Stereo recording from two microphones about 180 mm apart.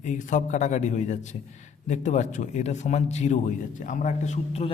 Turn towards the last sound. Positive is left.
turn(degrees=40)  # may be behind; listen again after turning